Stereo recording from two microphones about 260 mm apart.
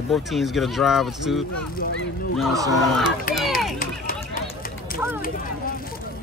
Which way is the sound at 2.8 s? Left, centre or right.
Centre.